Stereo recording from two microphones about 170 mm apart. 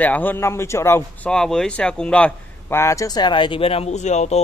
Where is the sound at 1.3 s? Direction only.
5° left (ahead or behind).